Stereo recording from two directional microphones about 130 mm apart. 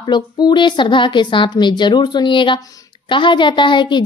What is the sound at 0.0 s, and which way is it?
A woman's voice, 35° left (ahead or behind).